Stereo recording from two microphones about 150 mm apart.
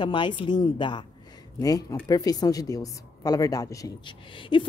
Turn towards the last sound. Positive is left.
turn(degrees=35)  # may be behind; listen again after turning